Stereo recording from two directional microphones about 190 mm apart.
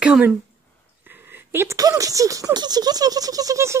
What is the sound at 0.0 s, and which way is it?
Speech, 5° right (ahead or behind).